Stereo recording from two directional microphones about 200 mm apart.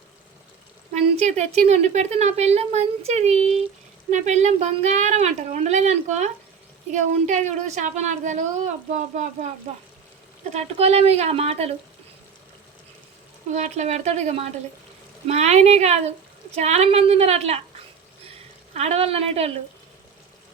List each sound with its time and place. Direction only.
0.9 s a woman's voice: 35° right (ahead or behind)
10.5 s a woman's voice: 30° right (ahead or behind)
13.5 s a woman's voice: 35° right (ahead or behind)
18.7 s a woman's voice: 35° right (ahead or behind)